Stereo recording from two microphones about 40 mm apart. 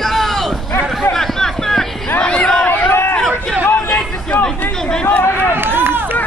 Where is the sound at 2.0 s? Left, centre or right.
Left.